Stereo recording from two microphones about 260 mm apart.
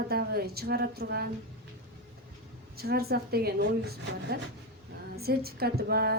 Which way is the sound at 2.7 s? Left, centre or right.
Right.